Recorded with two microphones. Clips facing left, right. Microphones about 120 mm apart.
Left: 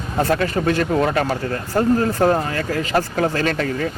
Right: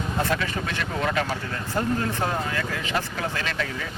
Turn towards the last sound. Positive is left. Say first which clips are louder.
# left 9 dB
turn(degrees=45)  # may be behind; listen again after turning